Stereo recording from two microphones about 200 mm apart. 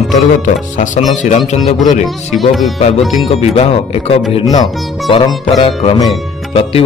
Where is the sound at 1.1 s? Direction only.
35° left (ahead or behind).